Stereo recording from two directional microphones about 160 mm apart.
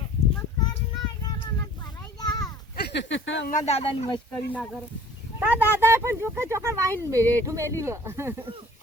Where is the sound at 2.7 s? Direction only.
90° left.